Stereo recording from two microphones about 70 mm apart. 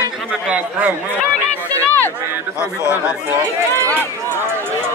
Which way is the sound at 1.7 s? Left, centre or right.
Left.